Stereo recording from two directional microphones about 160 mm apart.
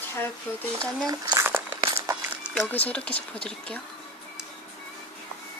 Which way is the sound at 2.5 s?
10° left (ahead or behind).